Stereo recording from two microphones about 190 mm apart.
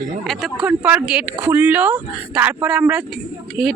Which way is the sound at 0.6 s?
10° right (ahead or behind).